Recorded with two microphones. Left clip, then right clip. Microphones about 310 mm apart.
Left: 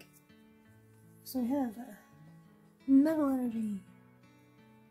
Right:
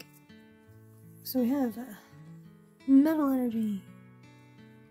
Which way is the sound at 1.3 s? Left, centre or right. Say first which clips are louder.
Right 5 dB; right.